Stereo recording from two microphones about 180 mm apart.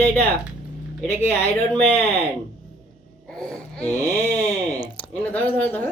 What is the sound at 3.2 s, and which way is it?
Speech, 5° left (ahead or behind).